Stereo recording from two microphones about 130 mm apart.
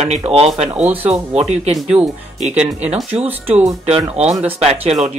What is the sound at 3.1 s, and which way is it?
Speech, 50° right (ahead or behind).